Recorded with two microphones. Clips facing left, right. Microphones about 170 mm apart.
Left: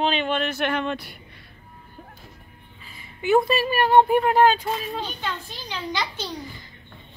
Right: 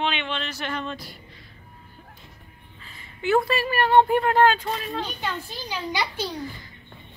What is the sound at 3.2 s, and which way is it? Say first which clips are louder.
Speech: left 2 dB; 15° left (ahead or behind).